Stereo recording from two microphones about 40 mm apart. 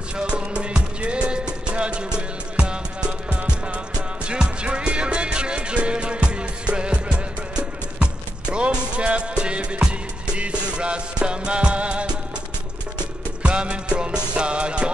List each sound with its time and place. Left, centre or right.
0.2 s music: right
13.4 s music: right